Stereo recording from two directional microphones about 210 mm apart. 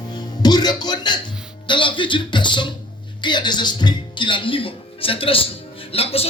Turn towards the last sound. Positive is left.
turn(degrees=30)  # may be behind; listen again after turning